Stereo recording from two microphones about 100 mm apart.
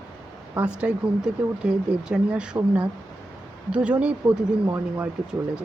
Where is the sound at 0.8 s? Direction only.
10° right (ahead or behind).